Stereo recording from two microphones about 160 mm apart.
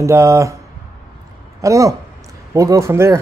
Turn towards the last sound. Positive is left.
turn(degrees=-15)  # may be behind; listen again after turning